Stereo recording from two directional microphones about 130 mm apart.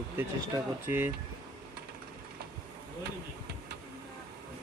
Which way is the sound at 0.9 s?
15° right (ahead or behind).